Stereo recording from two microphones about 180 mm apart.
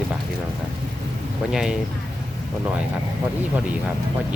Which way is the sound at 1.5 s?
5° right (ahead or behind).